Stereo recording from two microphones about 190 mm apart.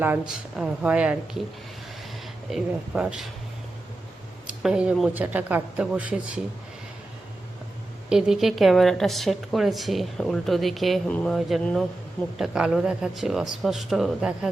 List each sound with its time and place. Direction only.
0.0 s speech: 5° right (ahead or behind)
2.5 s a woman's voice: 5° right (ahead or behind)
4.4 s speech: 5° right (ahead or behind)
8.1 s a woman's voice: centre (ahead or behind)